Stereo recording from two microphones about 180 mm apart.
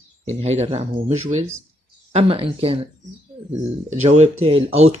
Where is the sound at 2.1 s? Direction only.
30° right (ahead or behind).